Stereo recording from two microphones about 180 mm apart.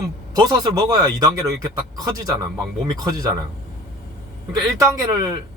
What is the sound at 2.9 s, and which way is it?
Speech, 20° right (ahead or behind).